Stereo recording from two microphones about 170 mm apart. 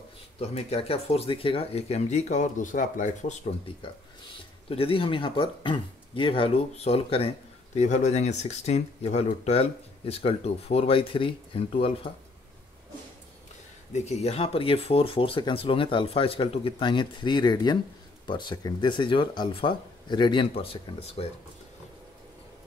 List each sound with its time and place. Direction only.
0.4 s speech: 35° left (ahead or behind)
3.6 s speech: 30° left (ahead or behind)
13.9 s speech: 40° left (ahead or behind)